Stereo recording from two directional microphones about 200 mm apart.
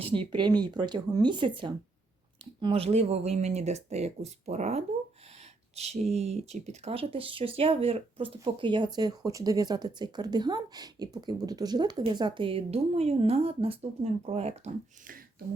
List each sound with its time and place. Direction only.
0.0 s speech: 25° right (ahead or behind)
5.7 s a sound: 35° right (ahead or behind)
6.1 s speech: 30° right (ahead or behind)